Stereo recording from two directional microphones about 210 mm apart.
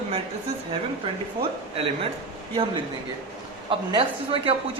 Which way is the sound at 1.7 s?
25° right (ahead or behind).